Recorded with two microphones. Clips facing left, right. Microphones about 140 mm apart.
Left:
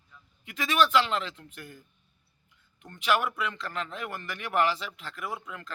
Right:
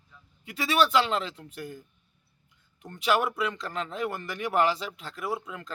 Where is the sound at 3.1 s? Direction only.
30° right (ahead or behind).